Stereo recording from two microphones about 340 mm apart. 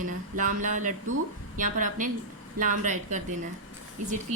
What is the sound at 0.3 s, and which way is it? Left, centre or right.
A woman's voice, right.